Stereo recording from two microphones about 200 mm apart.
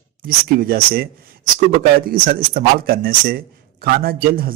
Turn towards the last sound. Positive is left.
turn(degrees=-45)  # may be behind; listen again after turning